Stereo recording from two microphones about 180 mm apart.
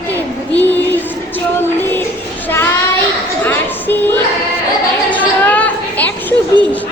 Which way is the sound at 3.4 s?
10° left (ahead or behind).